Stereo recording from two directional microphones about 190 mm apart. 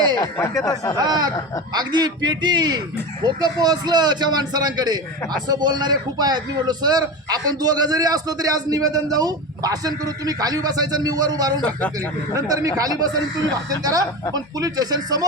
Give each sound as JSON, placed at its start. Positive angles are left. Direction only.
{"t": 0.3, "sound": "speech", "side_deg": 15}
{"t": 1.0, "sound": "a man's voice", "side_deg": -20}